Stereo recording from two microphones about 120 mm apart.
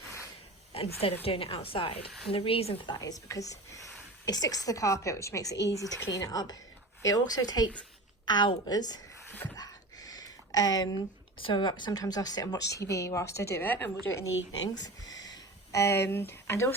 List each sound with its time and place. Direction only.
0.7 s a woman's voice: 55° left (ahead or behind)
2.8 s a woman's voice: 35° left (ahead or behind)
9.6 s a sound: 30° left (ahead or behind)
11.3 s speech: 45° left (ahead or behind); by 13.9 s 15° left (ahead or behind)
14.8 s speech: 35° left (ahead or behind)